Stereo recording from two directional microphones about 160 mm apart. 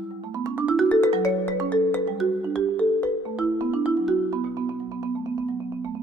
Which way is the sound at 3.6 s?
10° right (ahead or behind).